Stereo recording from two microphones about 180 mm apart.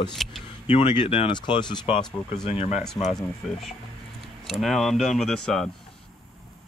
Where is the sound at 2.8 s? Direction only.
Centre (ahead or behind).